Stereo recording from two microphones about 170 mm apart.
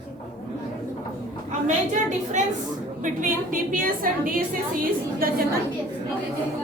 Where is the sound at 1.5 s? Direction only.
45° right (ahead or behind).